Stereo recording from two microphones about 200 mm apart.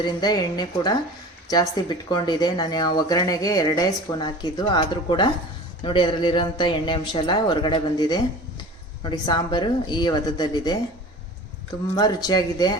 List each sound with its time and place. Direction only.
0.0 s speech: 20° left (ahead or behind)
11.9 s speech: 20° left (ahead or behind)